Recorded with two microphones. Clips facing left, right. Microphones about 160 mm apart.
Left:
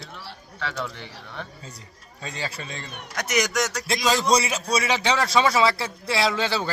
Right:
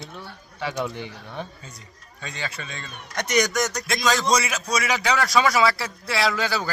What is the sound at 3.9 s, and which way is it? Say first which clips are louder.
A man's voice: left 1 dB; 30° left (ahead or behind).